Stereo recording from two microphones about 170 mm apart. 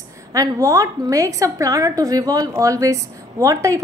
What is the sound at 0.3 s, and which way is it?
A woman's voice, 20° right (ahead or behind).